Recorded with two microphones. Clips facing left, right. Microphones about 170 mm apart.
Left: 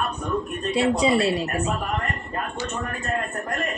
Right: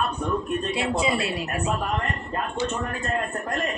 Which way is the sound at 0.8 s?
35° left (ahead or behind).